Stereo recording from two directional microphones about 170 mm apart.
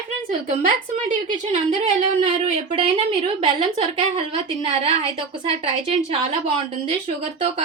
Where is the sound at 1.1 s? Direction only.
50° right (ahead or behind).